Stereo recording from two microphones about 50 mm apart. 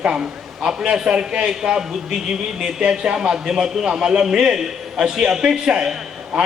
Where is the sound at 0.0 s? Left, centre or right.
Centre.